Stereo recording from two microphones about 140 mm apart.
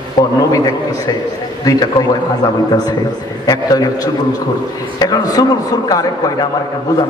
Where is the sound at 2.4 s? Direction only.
30° left (ahead or behind).